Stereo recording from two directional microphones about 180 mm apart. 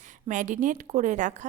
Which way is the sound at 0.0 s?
45° right (ahead or behind).